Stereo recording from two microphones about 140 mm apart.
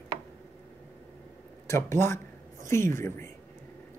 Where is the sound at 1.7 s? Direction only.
15° left (ahead or behind).